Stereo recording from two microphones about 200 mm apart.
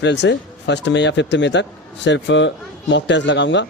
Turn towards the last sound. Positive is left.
turn(degrees=65)  # may be behind; listen again after turning